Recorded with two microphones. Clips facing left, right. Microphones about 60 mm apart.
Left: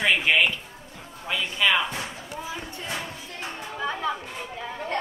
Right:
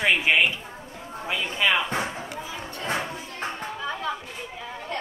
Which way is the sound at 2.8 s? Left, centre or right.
Right.